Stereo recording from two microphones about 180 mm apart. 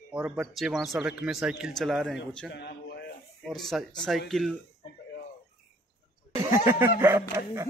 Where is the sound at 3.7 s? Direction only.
5° right (ahead or behind).